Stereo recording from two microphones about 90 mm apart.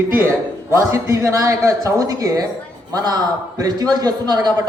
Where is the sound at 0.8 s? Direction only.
30° right (ahead or behind); by 4.6 s 45° right (ahead or behind).